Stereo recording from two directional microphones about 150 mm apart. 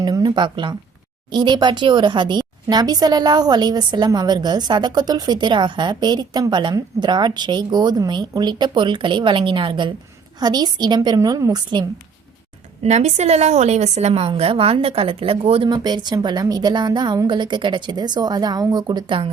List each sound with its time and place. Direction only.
0.0 s speech: 25° right (ahead or behind)
12.8 s a woman's voice: 50° right (ahead or behind)
15.7 s speech: 30° right (ahead or behind)